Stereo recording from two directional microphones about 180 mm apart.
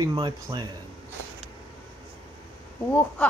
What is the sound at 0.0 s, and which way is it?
Speech, 25° right (ahead or behind).